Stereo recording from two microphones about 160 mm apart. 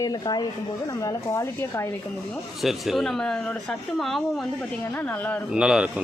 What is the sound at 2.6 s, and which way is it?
Speech, centre (ahead or behind).